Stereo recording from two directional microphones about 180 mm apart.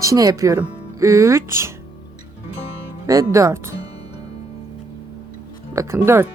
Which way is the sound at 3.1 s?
20° right (ahead or behind).